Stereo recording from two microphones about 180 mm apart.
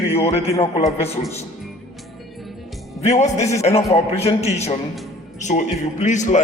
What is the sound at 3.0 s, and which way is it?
A man's voice, 40° left (ahead or behind).